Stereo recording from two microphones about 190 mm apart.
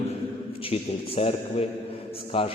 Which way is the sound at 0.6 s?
30° left (ahead or behind).